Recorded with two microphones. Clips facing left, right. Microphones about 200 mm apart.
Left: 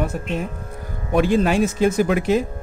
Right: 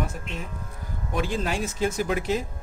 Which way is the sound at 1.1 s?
65° left (ahead or behind).